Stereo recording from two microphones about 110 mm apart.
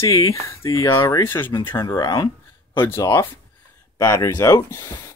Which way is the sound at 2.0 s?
40° left (ahead or behind).